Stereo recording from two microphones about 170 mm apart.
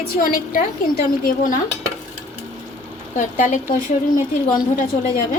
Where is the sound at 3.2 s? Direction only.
50° left (ahead or behind).